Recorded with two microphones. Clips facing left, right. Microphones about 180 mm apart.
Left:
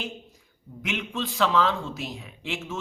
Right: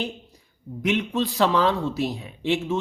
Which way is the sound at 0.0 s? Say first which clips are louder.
Right 5 dB; 35° right (ahead or behind).